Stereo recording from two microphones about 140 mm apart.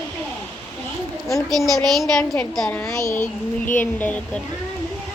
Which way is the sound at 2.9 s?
20° left (ahead or behind).